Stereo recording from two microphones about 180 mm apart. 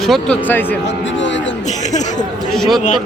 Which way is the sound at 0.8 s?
90° left.